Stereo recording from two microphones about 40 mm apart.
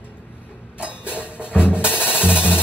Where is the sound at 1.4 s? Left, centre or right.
Left.